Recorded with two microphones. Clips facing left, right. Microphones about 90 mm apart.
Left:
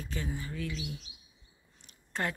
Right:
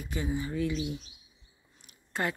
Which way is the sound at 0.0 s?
15° right (ahead or behind).